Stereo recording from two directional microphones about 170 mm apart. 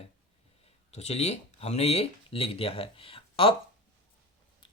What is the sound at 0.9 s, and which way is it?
Speech, 40° left (ahead or behind).